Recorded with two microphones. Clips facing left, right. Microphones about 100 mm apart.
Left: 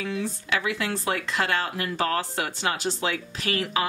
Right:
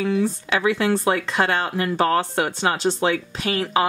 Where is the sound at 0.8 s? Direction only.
35° right (ahead or behind).